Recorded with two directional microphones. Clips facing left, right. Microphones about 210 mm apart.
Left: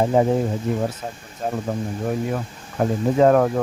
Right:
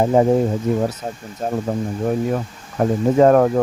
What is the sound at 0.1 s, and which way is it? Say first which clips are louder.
Speech: right 3 dB; 45° right (ahead or behind).